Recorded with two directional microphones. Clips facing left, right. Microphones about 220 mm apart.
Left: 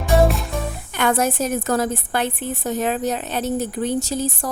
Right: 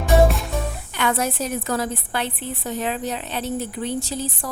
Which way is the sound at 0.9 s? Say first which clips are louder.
Left 4 dB; 45° left (ahead or behind).